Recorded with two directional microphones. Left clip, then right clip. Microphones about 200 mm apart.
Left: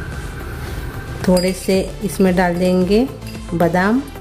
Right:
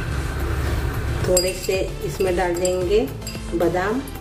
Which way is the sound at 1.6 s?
50° left (ahead or behind).